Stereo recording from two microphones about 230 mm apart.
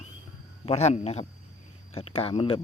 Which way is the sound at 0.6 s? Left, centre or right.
Left.